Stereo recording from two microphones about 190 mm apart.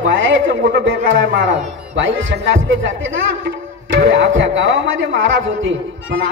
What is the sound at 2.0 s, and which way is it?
A man's voice, 90° right.